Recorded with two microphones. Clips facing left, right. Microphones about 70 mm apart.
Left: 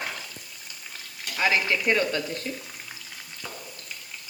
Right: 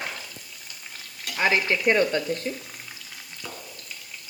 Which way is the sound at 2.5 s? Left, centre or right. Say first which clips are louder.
Right 3 dB; centre.